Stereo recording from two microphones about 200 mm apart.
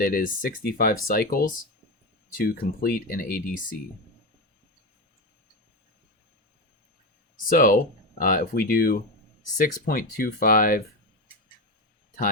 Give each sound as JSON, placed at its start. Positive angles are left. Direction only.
{"t": 0.0, "sound": "speech", "side_deg": 45}
{"t": 7.5, "sound": "speech", "side_deg": 45}